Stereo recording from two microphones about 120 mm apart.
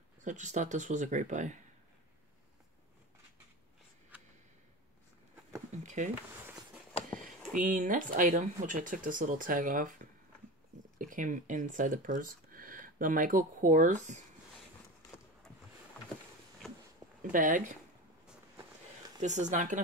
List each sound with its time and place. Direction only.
0.2 s speech: 90° right
5.7 s a sound: 90° right
7.1 s speech: 90° right
11.1 s speech: 90° right
16.6 s a sound: 5° left (ahead or behind)
17.2 s speech: 90° right
19.2 s speech: 85° right